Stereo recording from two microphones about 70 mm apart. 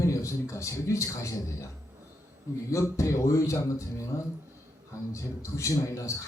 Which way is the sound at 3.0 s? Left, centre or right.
Left.